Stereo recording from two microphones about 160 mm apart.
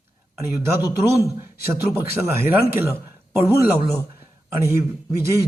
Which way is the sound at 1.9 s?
15° right (ahead or behind).